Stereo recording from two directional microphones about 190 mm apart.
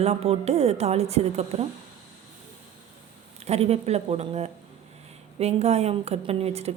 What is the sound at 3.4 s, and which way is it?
A woman's voice, 35° right (ahead or behind).